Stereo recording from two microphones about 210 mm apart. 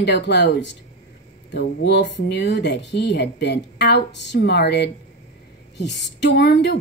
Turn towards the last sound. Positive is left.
turn(degrees=55)  # may be behind; listen again after turning